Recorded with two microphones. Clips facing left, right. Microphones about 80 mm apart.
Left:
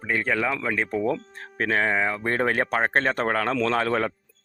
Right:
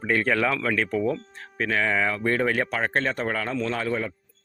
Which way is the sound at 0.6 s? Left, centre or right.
Left.